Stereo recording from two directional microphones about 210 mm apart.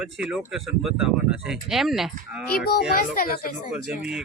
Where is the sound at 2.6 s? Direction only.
50° left (ahead or behind).